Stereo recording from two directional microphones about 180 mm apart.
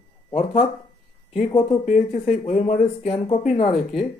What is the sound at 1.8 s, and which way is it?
Speech, 40° left (ahead or behind).